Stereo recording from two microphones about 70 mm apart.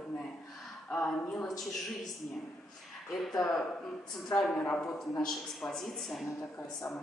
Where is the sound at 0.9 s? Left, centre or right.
Centre.